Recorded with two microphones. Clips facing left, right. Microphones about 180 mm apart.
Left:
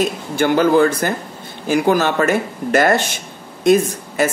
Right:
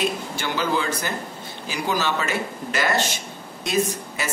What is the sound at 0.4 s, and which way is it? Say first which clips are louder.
Speech: left 13 dB; 55° left (ahead or behind).